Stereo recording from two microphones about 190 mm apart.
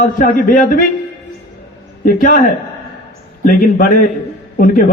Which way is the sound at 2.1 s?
45° left (ahead or behind).